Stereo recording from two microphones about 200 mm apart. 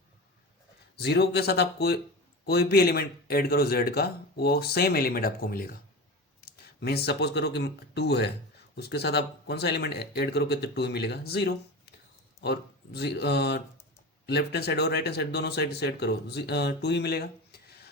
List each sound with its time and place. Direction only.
0.9 s speech: 55° left (ahead or behind)